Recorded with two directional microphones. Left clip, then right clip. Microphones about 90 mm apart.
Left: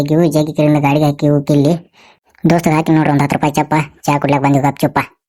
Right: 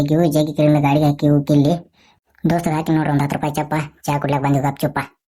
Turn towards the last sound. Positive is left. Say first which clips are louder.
# left 6 dB
turn(degrees=40)  # may be behind; listen again after turning